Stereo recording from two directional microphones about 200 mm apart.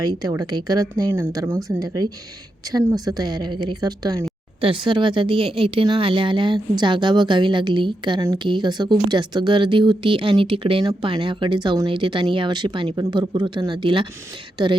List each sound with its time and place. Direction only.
0.0 s a woman's voice: 20° right (ahead or behind)